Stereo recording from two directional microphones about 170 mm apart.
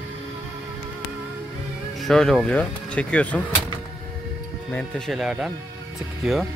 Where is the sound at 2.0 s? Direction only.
Centre (ahead or behind).